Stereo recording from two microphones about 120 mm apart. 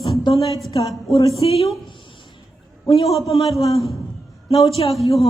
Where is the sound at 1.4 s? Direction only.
55° left (ahead or behind).